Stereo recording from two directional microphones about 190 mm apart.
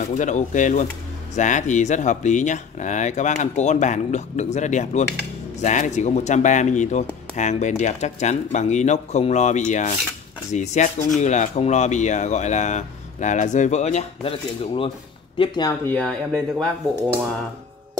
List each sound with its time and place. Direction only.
0.0 s speech: 40° left (ahead or behind)
15.3 s speech: 25° left (ahead or behind)
15.8 s speech: 10° left (ahead or behind)